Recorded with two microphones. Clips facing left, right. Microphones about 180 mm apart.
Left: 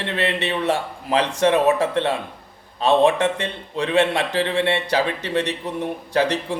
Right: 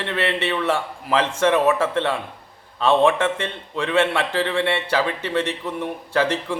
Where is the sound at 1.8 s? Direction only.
15° left (ahead or behind).